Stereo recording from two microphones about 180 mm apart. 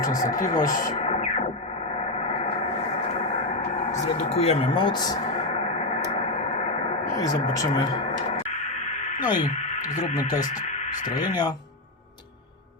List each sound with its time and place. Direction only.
0.2 s speech: 50° left (ahead or behind)
2.1 s a sound: 35° left (ahead or behind)
3.9 s speech: 40° left (ahead or behind); by 5.2 s 20° left (ahead or behind)
7.2 s speech: 20° left (ahead or behind)
9.2 s speech: 25° left (ahead or behind)